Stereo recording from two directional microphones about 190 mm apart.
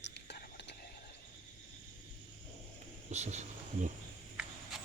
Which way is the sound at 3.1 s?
35° right (ahead or behind).